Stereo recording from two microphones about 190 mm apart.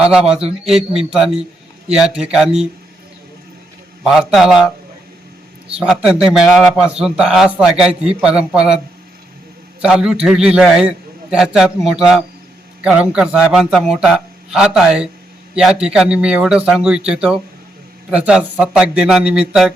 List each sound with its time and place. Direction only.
0.0 s a man's voice: 5° right (ahead or behind)
4.0 s a man's voice: centre (ahead or behind)
9.8 s a man's voice: 5° right (ahead or behind)